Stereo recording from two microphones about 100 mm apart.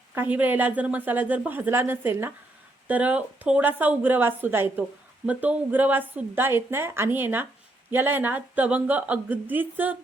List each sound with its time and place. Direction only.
0.1 s speech: 20° right (ahead or behind)